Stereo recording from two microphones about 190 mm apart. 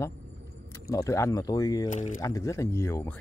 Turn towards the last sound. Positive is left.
turn(degrees=15)  # may be behind; listen again after turning